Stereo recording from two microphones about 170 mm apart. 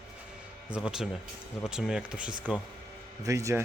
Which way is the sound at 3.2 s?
20° right (ahead or behind).